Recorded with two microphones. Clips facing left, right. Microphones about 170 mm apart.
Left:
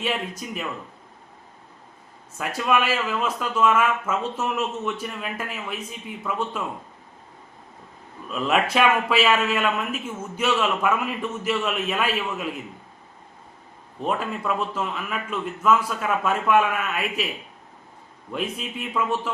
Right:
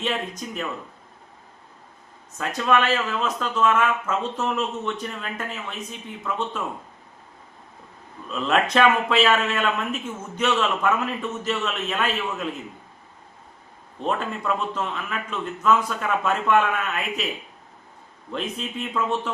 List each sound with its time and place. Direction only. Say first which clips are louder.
0.0 s a man's voice: even; 5° left (ahead or behind)
2.4 s a man's voice: right 1 dB; 10° left (ahead or behind)
8.3 s a man's voice: even; 5° left (ahead or behind)
14.0 s a man's voice: even; 5° left (ahead or behind)
18.3 s a man's voice: even; 5° left (ahead or behind)